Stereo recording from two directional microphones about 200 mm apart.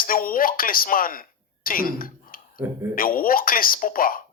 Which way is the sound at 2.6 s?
10° right (ahead or behind).